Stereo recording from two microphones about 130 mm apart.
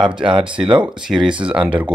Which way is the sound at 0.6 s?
40° right (ahead or behind).